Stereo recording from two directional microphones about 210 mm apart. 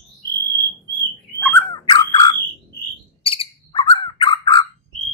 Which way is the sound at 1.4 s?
10° left (ahead or behind).